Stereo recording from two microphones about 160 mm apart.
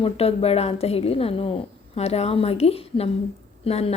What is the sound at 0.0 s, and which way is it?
Speech, 40° left (ahead or behind).